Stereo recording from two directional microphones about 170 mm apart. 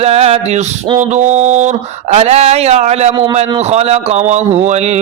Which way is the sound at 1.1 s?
45° right (ahead or behind).